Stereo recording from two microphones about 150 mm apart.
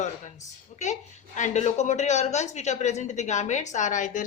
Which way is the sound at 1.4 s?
50° left (ahead or behind).